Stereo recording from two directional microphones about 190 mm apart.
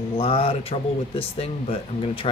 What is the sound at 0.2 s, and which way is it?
Speech, 30° left (ahead or behind).